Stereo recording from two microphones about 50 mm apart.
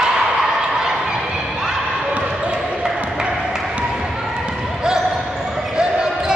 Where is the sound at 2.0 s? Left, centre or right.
Right.